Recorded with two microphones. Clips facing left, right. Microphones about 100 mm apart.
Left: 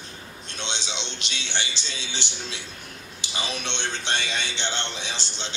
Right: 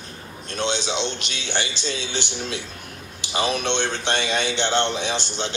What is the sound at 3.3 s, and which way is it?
A man's voice, 55° right (ahead or behind).